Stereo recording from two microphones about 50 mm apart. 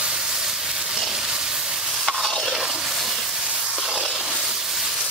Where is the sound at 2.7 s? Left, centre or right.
Centre.